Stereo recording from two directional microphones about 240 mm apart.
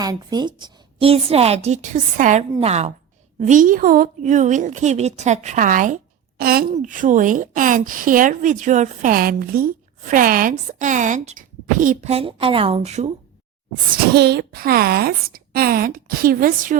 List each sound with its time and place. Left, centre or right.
0.0 s a woman's voice: centre
14.1 s a woman's voice: right